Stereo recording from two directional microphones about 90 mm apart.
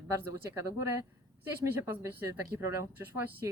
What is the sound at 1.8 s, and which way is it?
Speech, 30° right (ahead or behind).